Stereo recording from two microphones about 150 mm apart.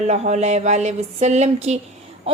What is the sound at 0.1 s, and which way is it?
A woman's voice, 50° right (ahead or behind).